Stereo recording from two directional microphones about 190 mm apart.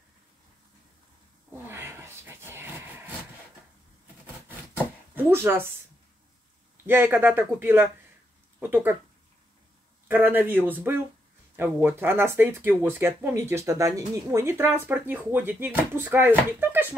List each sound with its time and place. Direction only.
1.5 s a sound: 15° right (ahead or behind)
5.1 s speech: 10° right (ahead or behind)
6.9 s speech: 10° right (ahead or behind)
10.0 s speech: 10° right (ahead or behind)